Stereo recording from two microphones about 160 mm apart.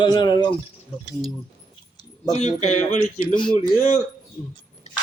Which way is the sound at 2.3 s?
45° left (ahead or behind).